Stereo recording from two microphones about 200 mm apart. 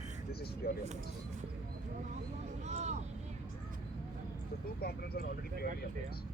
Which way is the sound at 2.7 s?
35° right (ahead or behind).